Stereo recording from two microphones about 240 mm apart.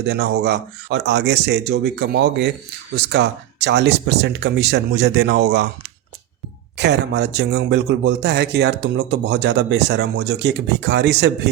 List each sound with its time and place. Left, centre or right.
0.1 s a man's voice: right
6.7 s a man's voice: right